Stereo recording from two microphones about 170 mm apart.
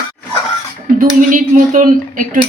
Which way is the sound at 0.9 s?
50° right (ahead or behind).